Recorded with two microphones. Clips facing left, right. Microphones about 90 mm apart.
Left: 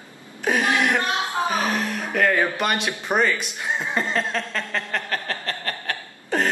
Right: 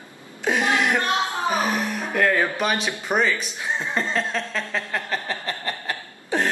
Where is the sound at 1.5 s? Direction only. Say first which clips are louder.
Even; 5° right (ahead or behind).